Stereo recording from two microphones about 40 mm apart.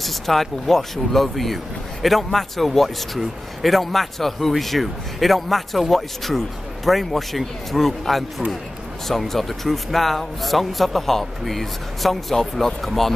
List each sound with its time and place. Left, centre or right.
0.0 s a man's voice: centre